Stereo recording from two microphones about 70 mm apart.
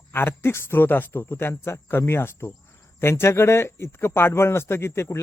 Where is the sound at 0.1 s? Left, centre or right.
Left.